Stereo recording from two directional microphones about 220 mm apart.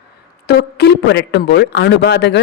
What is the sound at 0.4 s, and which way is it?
Speech, 50° left (ahead or behind).